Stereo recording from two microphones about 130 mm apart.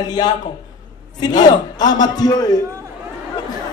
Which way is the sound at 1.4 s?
30° left (ahead or behind).